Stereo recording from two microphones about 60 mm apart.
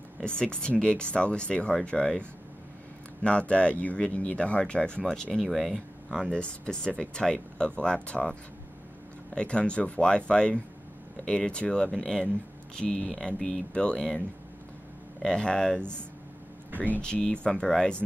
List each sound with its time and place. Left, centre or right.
0.2 s speech: centre
5.4 s speech: centre
6.3 s speech: centre
15.2 s speech: centre
17.0 s speech: centre